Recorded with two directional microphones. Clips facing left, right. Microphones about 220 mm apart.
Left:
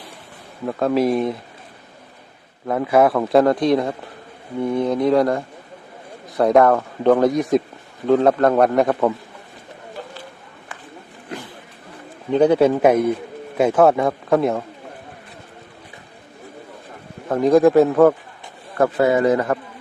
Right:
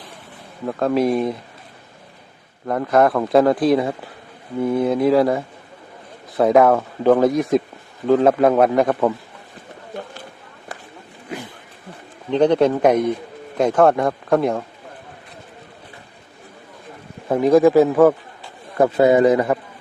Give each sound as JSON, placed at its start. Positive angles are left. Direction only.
{"t": 0.6, "sound": "speech", "side_deg": 0}
{"t": 2.6, "sound": "speech", "side_deg": 5}
{"t": 12.3, "sound": "a man's voice", "side_deg": 10}
{"t": 17.2, "sound": "speech", "side_deg": -10}
{"t": 18.8, "sound": "a man's voice", "side_deg": -20}